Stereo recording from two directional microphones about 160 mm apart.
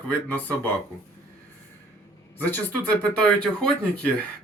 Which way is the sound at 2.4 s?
10° left (ahead or behind).